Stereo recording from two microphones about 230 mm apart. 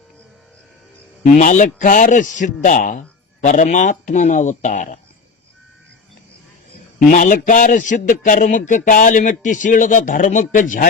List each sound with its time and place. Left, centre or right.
1.2 s a man's voice: left
7.1 s a man's voice: left